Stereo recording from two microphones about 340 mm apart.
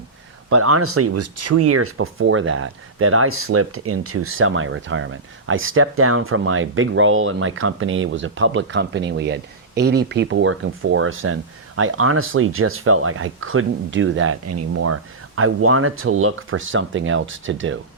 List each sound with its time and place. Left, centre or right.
0.5 s speech: right